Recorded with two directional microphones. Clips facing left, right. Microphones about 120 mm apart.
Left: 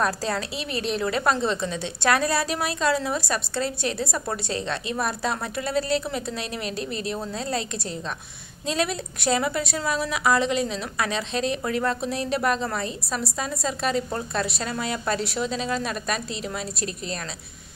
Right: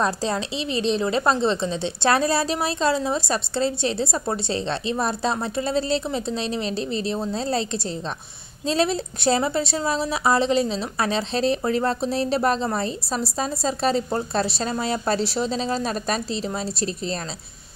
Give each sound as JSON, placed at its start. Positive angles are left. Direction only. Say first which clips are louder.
{"t": 0.0, "sound": "a woman's voice", "louder": "right 2 dB", "side_deg": -25}